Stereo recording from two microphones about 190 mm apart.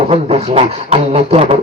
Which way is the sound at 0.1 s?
35° right (ahead or behind).